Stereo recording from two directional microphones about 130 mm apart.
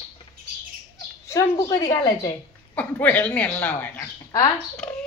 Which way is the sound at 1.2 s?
25° left (ahead or behind).